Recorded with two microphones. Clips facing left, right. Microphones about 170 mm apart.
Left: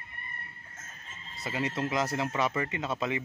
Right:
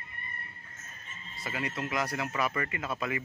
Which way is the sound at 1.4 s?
25° left (ahead or behind).